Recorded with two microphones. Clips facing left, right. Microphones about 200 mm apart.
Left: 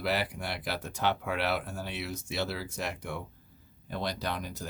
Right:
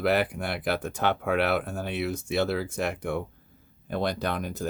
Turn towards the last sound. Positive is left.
turn(degrees=-50)  # may be behind; listen again after turning